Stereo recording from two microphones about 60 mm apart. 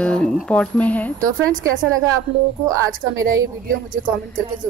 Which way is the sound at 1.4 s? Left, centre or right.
Right.